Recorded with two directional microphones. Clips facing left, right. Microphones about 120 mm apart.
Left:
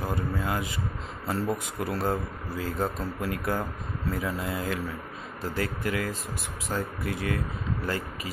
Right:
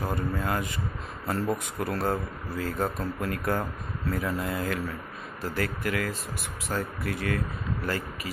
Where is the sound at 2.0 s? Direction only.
15° left (ahead or behind).